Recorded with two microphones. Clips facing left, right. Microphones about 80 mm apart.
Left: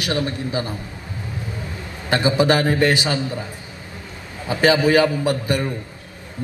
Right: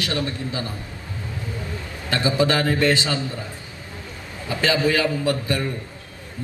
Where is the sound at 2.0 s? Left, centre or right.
Left.